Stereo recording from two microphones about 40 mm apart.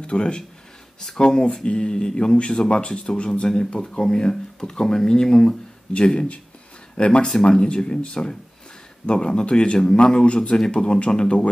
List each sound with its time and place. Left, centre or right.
0.0 s speech: left
10.2 s speech: left